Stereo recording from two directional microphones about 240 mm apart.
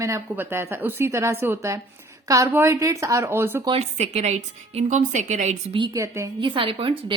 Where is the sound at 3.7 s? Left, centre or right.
Right.